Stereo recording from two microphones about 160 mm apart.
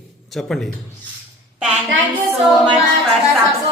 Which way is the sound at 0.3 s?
Centre (ahead or behind).